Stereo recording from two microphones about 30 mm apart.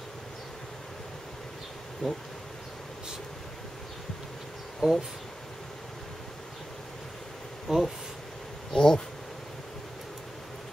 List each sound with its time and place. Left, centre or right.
2.0 s speech: left
4.7 s speech: centre
7.6 s speech: centre
8.7 s speech: left